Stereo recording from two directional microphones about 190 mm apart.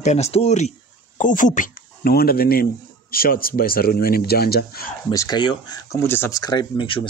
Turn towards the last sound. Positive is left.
turn(degrees=25)  # may be behind; listen again after turning